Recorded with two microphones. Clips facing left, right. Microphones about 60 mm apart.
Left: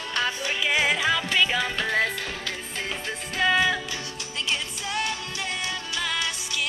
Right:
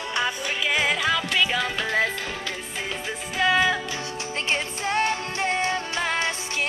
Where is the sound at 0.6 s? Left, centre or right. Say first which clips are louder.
Even; centre.